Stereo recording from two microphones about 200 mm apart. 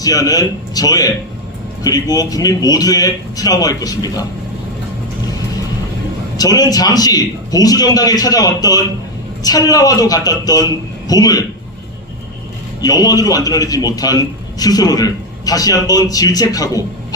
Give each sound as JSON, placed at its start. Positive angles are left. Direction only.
{"t": 0.0, "sound": "a man's voice", "side_deg": 20}
{"t": 6.3, "sound": "a man's voice", "side_deg": 20}
{"t": 12.8, "sound": "a man's voice", "side_deg": 20}